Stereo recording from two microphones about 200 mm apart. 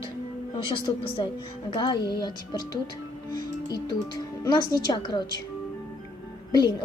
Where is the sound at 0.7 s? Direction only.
25° left (ahead or behind).